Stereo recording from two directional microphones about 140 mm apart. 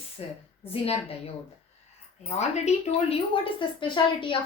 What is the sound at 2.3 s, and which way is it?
Speech, 55° left (ahead or behind).